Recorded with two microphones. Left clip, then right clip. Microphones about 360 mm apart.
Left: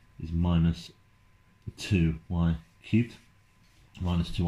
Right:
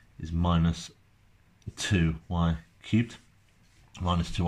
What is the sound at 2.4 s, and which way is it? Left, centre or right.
Speech, right.